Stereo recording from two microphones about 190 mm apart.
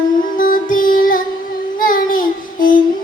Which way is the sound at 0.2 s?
45° left (ahead or behind).